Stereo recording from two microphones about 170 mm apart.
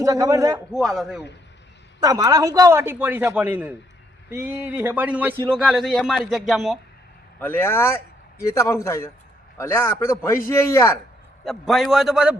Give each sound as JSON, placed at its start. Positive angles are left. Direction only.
{"t": 0.0, "sound": "a man's voice", "side_deg": -20}
{"t": 0.7, "sound": "speech", "side_deg": 0}
{"t": 2.0, "sound": "a man's voice", "side_deg": -20}
{"t": 7.3, "sound": "a man's voice", "side_deg": 10}
{"t": 11.4, "sound": "speech", "side_deg": 0}